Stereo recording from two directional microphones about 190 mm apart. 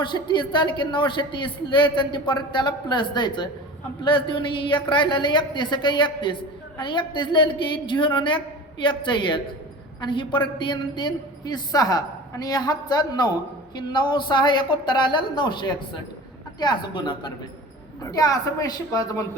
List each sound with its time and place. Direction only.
0.0 s speech: 25° left (ahead or behind)